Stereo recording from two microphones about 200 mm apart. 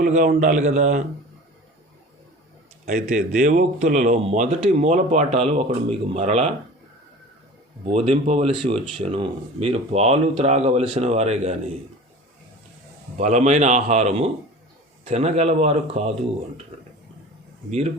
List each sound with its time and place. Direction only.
0.0 s a man's voice: 40° right (ahead or behind)
2.8 s a man's voice: 35° right (ahead or behind)
7.9 s a man's voice: 30° right (ahead or behind)
13.1 s a man's voice: 35° right (ahead or behind)
17.7 s a man's voice: 35° right (ahead or behind)